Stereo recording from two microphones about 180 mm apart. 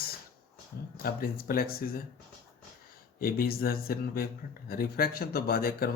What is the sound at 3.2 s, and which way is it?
Speech, 55° left (ahead or behind).